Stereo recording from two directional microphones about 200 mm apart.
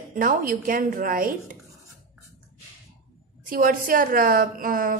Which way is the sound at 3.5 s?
45° right (ahead or behind).